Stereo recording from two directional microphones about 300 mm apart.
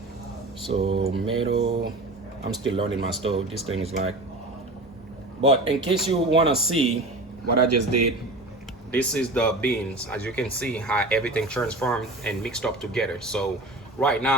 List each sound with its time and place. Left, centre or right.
0.7 s speech: centre
5.4 s speech: centre
7.5 s a man's voice: right
8.9 s speech: centre